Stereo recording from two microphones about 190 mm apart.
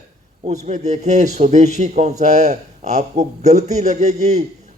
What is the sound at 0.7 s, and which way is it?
A man's voice, 40° right (ahead or behind).